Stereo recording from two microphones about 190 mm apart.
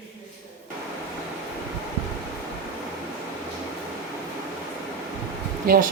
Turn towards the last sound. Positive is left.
turn(degrees=-50)  # may be behind; listen again after turning